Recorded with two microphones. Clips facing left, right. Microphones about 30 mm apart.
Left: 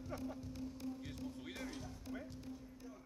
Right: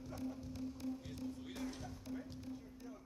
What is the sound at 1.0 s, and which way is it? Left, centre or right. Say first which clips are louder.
Basketball bounce: right 1 dB; centre.